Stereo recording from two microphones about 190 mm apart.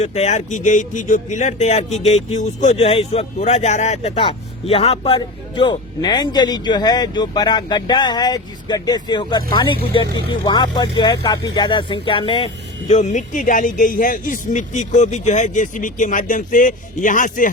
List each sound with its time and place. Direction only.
0.0 s speech: 35° left (ahead or behind)
12.9 s speech: 40° left (ahead or behind)